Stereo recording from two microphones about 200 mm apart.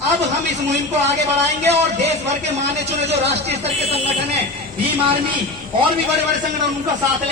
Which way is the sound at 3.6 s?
30° right (ahead or behind).